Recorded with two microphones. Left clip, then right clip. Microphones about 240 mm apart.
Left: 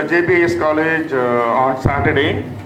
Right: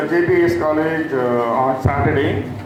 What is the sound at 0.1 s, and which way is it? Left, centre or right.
A man's voice, centre.